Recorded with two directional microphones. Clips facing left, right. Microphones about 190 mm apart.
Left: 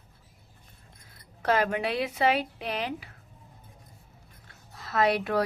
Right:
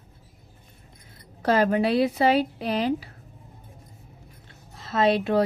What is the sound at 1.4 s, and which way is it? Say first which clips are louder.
Speech: right 5 dB; 35° right (ahead or behind).